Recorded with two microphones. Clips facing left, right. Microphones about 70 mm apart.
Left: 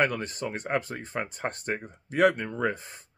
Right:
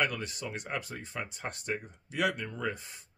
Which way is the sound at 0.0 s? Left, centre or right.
Left.